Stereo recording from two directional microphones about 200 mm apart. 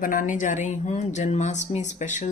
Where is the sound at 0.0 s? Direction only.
40° left (ahead or behind).